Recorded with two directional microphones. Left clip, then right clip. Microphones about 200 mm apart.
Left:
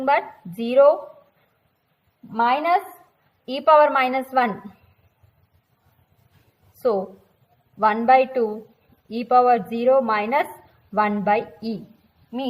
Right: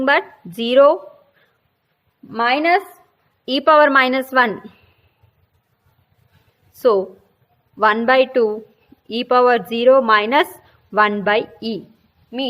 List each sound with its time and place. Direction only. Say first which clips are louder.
0.0 s a woman's voice: right 4 dB; 40° right (ahead or behind)
2.3 s a woman's voice: right 3 dB; 45° right (ahead or behind)
7.8 s a woman's voice: right 2 dB; 40° right (ahead or behind)